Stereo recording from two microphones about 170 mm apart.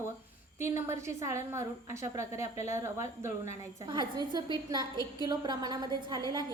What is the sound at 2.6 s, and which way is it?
A woman's voice, 15° right (ahead or behind).